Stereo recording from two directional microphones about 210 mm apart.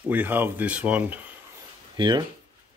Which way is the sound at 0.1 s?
10° right (ahead or behind).